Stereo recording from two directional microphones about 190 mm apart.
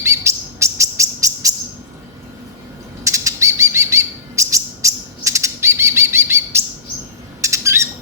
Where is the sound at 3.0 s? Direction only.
15° right (ahead or behind).